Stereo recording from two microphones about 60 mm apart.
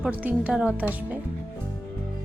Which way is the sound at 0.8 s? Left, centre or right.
Right.